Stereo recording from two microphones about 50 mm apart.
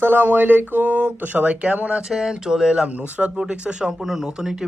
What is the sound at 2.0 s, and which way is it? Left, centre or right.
Speech, centre.